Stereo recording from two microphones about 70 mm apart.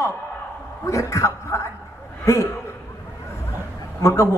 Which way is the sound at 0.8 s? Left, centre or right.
Left.